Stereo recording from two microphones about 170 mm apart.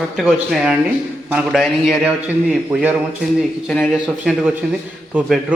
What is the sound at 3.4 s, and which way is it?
A man's voice, 5° left (ahead or behind).